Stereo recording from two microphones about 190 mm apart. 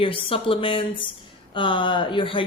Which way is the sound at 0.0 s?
30° left (ahead or behind).